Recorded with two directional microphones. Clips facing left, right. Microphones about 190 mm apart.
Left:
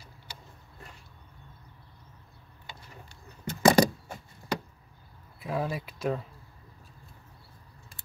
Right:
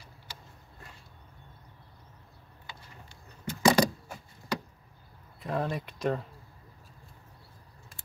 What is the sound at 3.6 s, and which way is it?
Vehicle, 50° left (ahead or behind).